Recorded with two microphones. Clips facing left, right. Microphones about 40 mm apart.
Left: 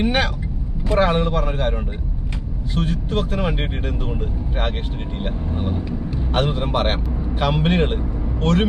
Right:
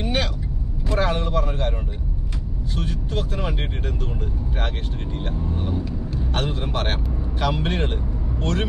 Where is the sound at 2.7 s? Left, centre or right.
Left.